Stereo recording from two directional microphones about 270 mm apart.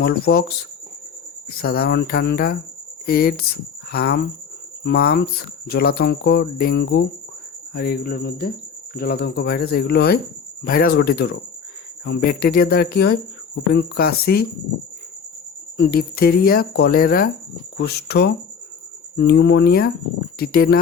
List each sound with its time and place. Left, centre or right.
0.0 s speech: left
1.5 s speech: left
15.8 s speech: left